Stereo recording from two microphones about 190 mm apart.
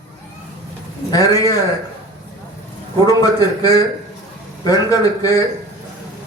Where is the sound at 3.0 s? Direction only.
20° left (ahead or behind).